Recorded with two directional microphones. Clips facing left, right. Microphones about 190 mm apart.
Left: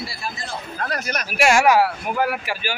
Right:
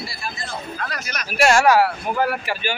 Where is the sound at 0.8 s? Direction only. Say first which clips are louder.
Left 4 dB; 55° left (ahead or behind).